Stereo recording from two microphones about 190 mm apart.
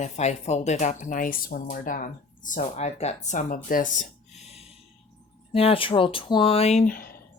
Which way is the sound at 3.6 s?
45° left (ahead or behind).